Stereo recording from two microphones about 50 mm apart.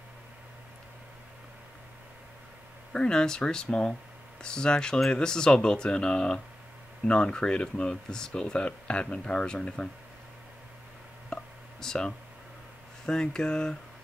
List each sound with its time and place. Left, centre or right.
2.9 s speech: centre
11.3 s a sound: centre
11.8 s speech: centre